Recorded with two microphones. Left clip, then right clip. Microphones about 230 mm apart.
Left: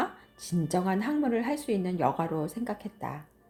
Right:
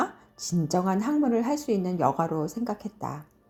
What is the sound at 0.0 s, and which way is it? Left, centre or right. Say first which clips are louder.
A woman's voice: right 3 dB; right.